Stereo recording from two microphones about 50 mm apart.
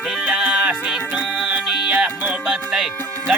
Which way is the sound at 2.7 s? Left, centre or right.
Centre.